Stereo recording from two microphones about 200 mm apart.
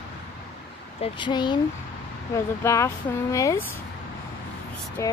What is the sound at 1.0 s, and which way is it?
Speech, 25° left (ahead or behind).